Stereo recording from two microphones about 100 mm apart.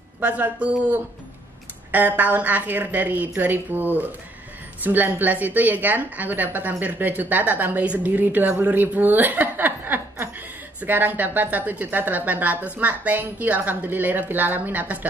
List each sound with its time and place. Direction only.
0.2 s a woman's voice: 15° right (ahead or behind)